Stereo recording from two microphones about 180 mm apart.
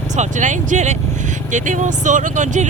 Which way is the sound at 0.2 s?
45° right (ahead or behind).